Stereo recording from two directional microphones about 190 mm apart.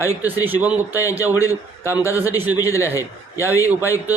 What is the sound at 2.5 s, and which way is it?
A man's voice, 15° left (ahead or behind).